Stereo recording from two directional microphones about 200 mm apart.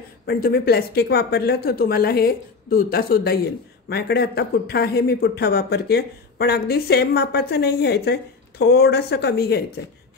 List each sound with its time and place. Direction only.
0.3 s speech: 50° left (ahead or behind)